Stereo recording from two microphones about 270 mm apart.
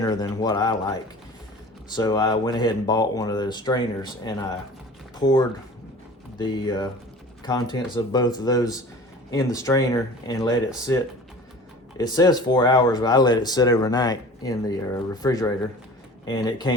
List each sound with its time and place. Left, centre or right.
0.0 s speech: centre
2.0 s speech: centre
11.9 s speech: centre